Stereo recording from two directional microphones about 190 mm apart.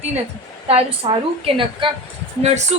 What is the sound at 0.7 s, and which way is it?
A woman's voice, 30° right (ahead or behind).